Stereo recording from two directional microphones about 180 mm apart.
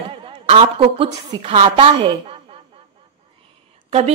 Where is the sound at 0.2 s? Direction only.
30° right (ahead or behind).